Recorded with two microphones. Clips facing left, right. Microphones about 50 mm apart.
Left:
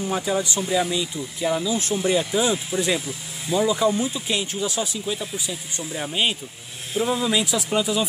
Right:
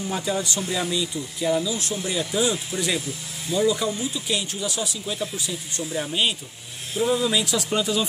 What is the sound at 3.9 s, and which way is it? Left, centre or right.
Speech, left.